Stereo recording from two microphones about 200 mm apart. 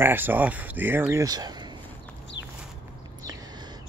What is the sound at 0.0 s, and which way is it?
Speech, 10° right (ahead or behind).